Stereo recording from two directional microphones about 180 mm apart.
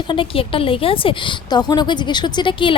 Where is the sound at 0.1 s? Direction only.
30° left (ahead or behind).